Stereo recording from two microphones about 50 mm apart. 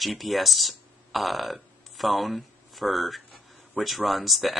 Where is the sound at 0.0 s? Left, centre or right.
Centre.